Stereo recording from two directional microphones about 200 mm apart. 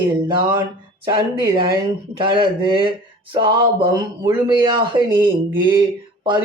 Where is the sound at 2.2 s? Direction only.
25° right (ahead or behind).